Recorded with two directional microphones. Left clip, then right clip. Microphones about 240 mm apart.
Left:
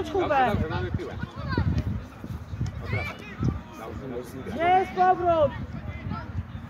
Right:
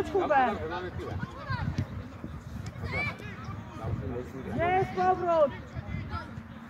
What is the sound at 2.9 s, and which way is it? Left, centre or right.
Run, centre.